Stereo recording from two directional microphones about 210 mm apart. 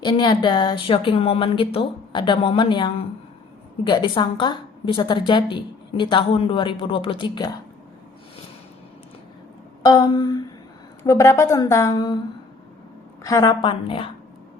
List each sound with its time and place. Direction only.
0.0 s a woman's voice: 20° left (ahead or behind)
9.8 s a woman's voice: 20° left (ahead or behind)
13.2 s a woman's voice: 15° left (ahead or behind)